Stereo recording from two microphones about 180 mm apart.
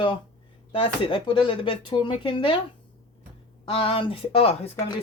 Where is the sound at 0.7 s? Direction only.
30° left (ahead or behind).